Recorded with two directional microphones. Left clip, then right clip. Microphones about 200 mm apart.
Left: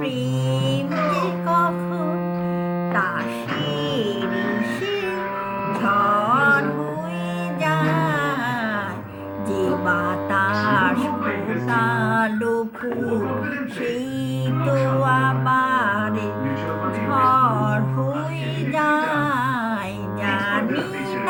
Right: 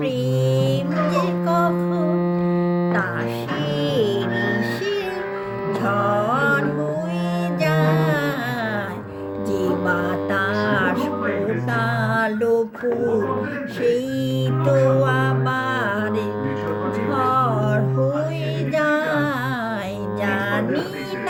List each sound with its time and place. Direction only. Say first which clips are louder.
0.6 s music: right 1 dB; 20° right (ahead or behind)
2.1 s music: right 4 dB; 45° right (ahead or behind)
5.8 s music: left 2 dB; 20° right (ahead or behind)
7.6 s music: even; 20° right (ahead or behind)
9.5 s music: even; 15° right (ahead or behind)
14.7 s music: right 2 dB; 15° right (ahead or behind)
17.1 s music: left 3 dB; 20° right (ahead or behind)
18.7 s female singing: even; 15° right (ahead or behind)